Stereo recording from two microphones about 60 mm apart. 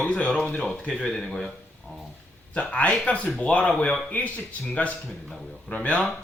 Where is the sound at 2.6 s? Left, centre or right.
Centre.